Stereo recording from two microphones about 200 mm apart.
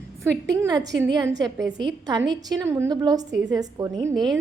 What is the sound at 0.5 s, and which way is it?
A woman's voice, 20° right (ahead or behind).